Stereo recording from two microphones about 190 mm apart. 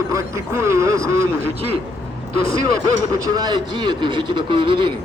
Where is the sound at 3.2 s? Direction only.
20° right (ahead or behind).